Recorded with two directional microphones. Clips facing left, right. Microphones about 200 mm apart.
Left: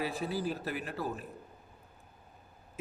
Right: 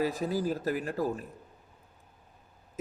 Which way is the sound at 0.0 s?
40° right (ahead or behind).